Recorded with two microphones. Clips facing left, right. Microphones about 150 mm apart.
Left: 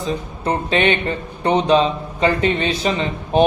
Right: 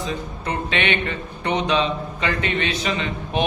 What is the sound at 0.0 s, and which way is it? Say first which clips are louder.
A man's voice: left 4 dB; 35° left (ahead or behind).